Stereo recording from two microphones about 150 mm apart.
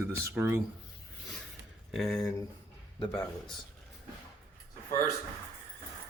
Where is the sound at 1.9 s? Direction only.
Centre (ahead or behind).